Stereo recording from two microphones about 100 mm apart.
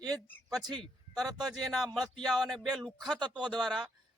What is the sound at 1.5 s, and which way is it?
A man's voice, centre (ahead or behind).